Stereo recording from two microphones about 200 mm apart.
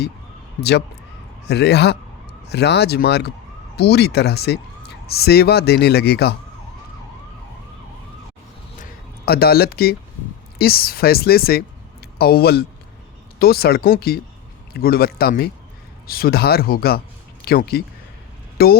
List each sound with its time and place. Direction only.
1.5 s speech: 55° left (ahead or behind)
8.8 s a sound: 50° left (ahead or behind)
10.6 s speech: 50° left (ahead or behind)